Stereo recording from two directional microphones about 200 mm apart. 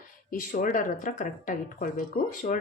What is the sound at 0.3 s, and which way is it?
Speech, 45° left (ahead or behind).